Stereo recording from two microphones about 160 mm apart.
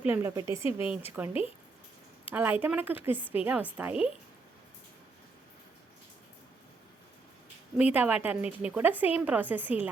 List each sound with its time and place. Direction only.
0.0 s a woman's voice: 15° right (ahead or behind)
0.6 s speech: 35° left (ahead or behind)
1.1 s a woman's voice: 10° right (ahead or behind)
7.9 s a woman's voice: 10° right (ahead or behind)